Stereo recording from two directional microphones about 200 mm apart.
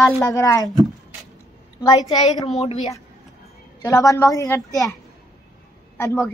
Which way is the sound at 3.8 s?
15° left (ahead or behind).